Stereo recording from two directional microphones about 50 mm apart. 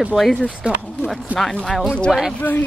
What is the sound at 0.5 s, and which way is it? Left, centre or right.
Speech, right.